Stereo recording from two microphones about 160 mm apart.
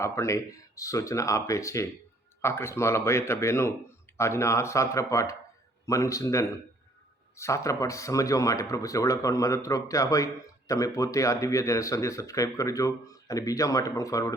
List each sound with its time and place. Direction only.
0.0 s speech: 20° left (ahead or behind)